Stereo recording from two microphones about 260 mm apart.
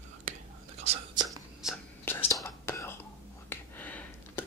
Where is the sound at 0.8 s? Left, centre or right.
Right.